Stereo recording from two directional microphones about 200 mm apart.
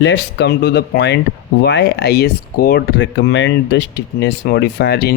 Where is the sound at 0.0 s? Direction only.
60° left (ahead or behind).